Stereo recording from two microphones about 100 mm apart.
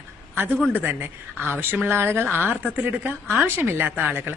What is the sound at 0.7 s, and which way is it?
A man's voice, 20° right (ahead or behind).